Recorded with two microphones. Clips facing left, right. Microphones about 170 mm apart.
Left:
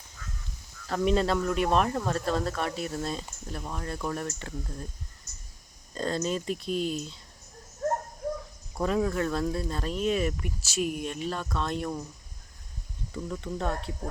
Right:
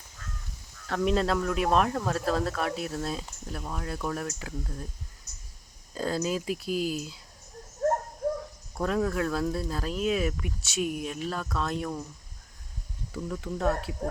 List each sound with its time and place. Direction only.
0.9 s speech: centre (ahead or behind)
5.9 s speech: 5° right (ahead or behind)
8.8 s speech: centre (ahead or behind)
13.2 s speech: centre (ahead or behind)